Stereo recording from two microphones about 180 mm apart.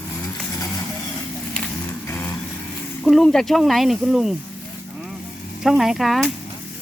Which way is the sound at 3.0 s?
Centre (ahead or behind).